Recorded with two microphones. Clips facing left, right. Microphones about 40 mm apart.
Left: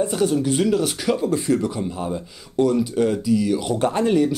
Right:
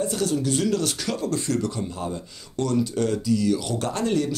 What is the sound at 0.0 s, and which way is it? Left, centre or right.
Speech, left.